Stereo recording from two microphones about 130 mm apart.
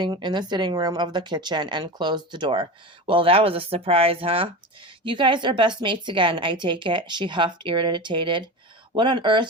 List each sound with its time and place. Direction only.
0.0 s a woman's voice: 35° right (ahead or behind)